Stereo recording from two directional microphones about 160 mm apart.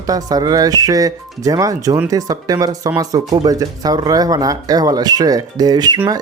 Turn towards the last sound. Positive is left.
turn(degrees=-25)  # may be behind; listen again after turning